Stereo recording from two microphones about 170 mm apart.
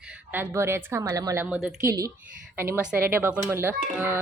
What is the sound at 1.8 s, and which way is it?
A woman's voice, 20° right (ahead or behind).